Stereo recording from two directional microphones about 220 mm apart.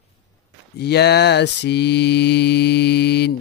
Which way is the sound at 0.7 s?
50° left (ahead or behind).